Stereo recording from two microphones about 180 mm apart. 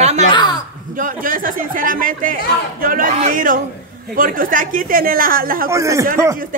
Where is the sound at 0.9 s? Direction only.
50° right (ahead or behind).